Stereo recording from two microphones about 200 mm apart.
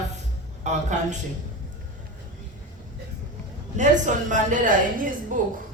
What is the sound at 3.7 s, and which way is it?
A woman's voice, 40° right (ahead or behind).